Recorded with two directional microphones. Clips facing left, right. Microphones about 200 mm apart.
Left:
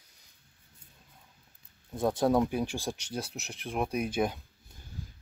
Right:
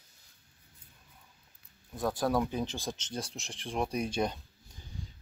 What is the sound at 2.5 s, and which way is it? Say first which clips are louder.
Speech: left 3 dB; 10° left (ahead or behind).